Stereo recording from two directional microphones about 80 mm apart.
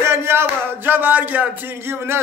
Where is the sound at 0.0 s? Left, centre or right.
Right.